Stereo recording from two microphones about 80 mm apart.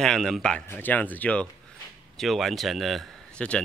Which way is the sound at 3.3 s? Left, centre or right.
Centre.